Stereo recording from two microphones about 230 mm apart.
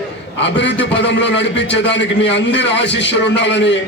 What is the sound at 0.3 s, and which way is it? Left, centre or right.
A man's voice, left.